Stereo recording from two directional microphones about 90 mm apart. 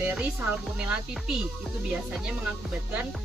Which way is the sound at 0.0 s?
15° right (ahead or behind).